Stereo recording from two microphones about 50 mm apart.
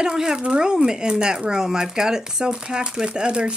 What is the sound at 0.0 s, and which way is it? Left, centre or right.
Speech, centre.